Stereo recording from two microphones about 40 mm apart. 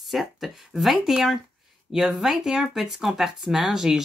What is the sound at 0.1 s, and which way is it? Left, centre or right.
Speech, centre.